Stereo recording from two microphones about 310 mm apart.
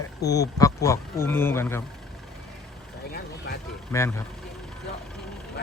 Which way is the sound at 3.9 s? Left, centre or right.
Centre.